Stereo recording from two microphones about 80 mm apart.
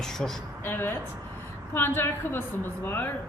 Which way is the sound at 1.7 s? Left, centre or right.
Left.